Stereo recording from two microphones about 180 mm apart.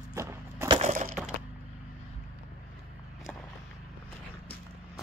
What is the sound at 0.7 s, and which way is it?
Wood, 35° right (ahead or behind).